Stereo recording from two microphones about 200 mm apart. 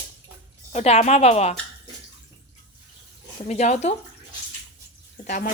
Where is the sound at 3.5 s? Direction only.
35° left (ahead or behind).